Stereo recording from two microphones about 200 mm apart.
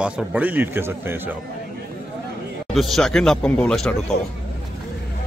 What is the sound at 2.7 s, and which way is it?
A man's voice, centre (ahead or behind).